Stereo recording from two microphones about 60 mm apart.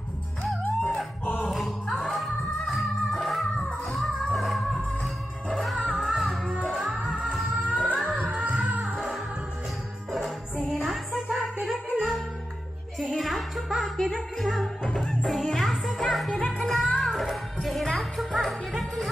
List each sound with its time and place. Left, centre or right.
1.4 s music: centre
5.9 s music: centre
7.7 s music: centre
10.7 s music: centre